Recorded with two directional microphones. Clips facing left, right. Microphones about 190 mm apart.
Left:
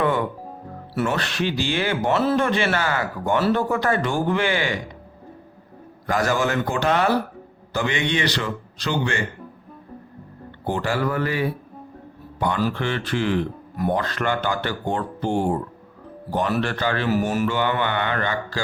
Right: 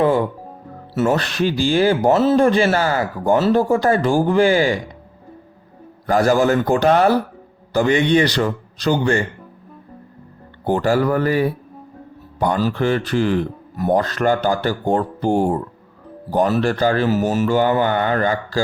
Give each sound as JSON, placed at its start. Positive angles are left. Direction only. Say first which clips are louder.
{"t": 0.0, "sound": "speech", "louder": "right 5 dB", "side_deg": -30}
{"t": 6.1, "sound": "speech", "louder": "right 7 dB", "side_deg": -35}
{"t": 10.7, "sound": "speech", "louder": "right 7 dB", "side_deg": -40}
{"t": 16.6, "sound": "speech", "louder": "right 6 dB", "side_deg": -40}
{"t": 17.1, "sound": "speech", "louder": "right 3 dB", "side_deg": -25}
{"t": 17.5, "sound": "speech", "louder": "right 6 dB", "side_deg": -40}